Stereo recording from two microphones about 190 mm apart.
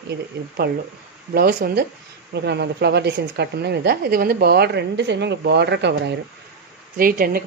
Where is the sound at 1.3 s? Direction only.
55° right (ahead or behind).